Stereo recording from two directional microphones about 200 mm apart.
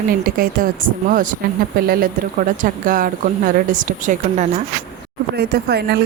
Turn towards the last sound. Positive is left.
turn(degrees=-50)  # may be behind; listen again after turning